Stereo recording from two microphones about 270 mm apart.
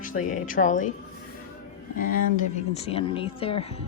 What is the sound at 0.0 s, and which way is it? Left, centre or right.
Speech, left.